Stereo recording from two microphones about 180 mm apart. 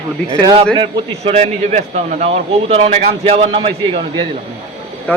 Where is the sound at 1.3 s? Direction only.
40° right (ahead or behind).